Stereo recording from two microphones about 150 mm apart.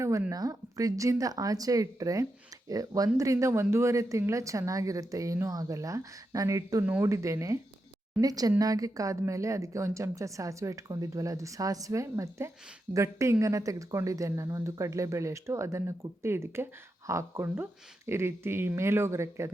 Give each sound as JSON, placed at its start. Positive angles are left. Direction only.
{"t": 0.0, "sound": "speech", "side_deg": -20}